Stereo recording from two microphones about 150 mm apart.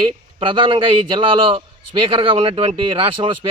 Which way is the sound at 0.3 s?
35° right (ahead or behind).